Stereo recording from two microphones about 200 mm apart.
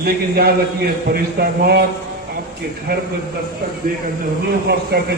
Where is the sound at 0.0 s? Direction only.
50° right (ahead or behind).